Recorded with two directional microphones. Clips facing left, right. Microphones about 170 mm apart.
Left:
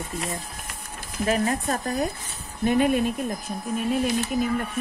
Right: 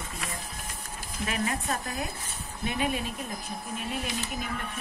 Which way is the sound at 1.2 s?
40° left (ahead or behind).